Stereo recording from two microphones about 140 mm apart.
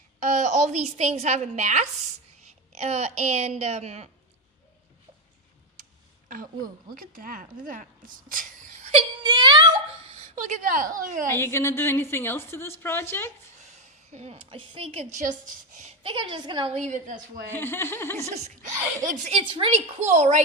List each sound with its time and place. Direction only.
0.2 s a woman's voice: 60° right (ahead or behind)
6.9 s speech: 90° right; by 8.8 s 75° right (ahead or behind)
9.2 s a sound: 30° right (ahead or behind)
10.1 s speech: 55° right (ahead or behind); by 11.3 s 75° right (ahead or behind)
11.3 s a woman's voice: 20° left (ahead or behind)
13.7 s speech: 50° right (ahead or behind)
15.1 s a woman's voice: 65° right (ahead or behind)
15.8 s a woman's voice: 40° right (ahead or behind); by 17.2 s 60° right (ahead or behind)
17.5 s a woman's voice: 15° left (ahead or behind)
18.3 s a woman's voice: 55° right (ahead or behind)
19.0 s a woman's voice: 65° right (ahead or behind)
19.3 s a woman's voice: 40° right (ahead or behind)
20.0 s a woman's voice: 50° right (ahead or behind)